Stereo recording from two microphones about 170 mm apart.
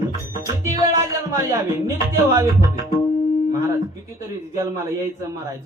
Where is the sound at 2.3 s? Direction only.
20° right (ahead or behind).